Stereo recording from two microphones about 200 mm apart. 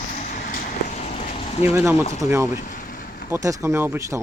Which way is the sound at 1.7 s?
15° right (ahead or behind).